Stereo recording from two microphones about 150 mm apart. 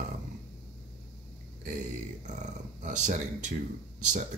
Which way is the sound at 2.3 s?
55° right (ahead or behind).